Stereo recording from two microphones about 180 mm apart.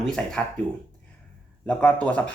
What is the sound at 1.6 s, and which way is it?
Speech, 10° left (ahead or behind).